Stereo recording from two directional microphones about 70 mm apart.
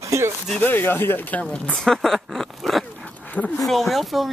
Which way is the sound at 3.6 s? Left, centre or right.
Centre.